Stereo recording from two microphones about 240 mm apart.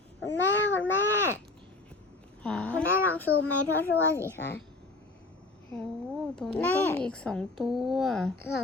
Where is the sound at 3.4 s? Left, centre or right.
Left.